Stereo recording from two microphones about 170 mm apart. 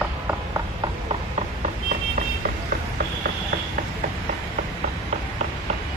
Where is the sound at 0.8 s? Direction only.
35° right (ahead or behind).